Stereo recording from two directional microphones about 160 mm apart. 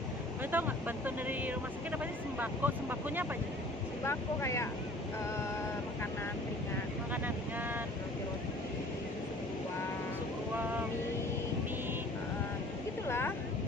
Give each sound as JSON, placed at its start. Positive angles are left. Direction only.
{"t": 0.5, "sound": "speech", "side_deg": -10}
{"t": 4.0, "sound": "speech", "side_deg": 15}
{"t": 7.1, "sound": "speech", "side_deg": -10}
{"t": 13.1, "sound": "a sound", "side_deg": 15}